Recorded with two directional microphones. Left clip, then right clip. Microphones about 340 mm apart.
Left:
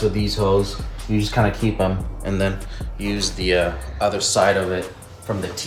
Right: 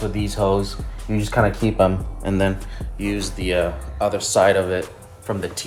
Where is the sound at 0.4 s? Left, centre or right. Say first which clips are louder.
Even; right.